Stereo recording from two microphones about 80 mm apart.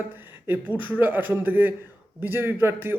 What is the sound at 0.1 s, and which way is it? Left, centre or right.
Speech, right.